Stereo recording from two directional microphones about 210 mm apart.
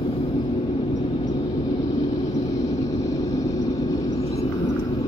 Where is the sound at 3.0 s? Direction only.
15° left (ahead or behind).